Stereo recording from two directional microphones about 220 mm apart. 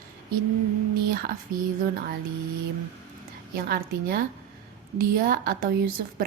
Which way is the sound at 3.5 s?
45° right (ahead or behind).